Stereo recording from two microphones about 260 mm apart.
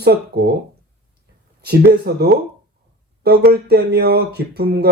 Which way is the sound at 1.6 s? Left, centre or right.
Right.